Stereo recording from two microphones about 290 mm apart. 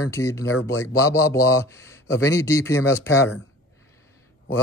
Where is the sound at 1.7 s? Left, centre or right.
Centre.